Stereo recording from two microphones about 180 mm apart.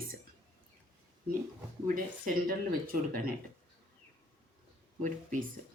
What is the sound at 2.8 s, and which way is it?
Speech, 55° right (ahead or behind).